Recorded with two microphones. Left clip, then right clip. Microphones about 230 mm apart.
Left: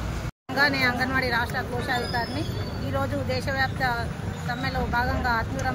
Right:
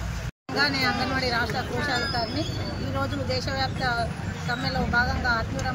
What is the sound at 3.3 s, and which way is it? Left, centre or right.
Speech, left.